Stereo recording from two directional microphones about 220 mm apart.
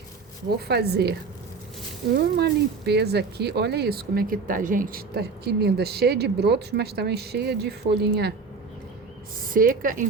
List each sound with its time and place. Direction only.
0.5 s speech: 45° right (ahead or behind)
2.1 s speech: 45° right (ahead or behind)
9.5 s speech: 40° right (ahead or behind)